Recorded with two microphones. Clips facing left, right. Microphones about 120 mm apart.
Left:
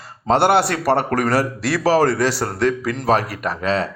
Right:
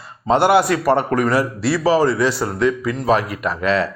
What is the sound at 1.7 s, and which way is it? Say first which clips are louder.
A man's voice: even; 70° left (ahead or behind).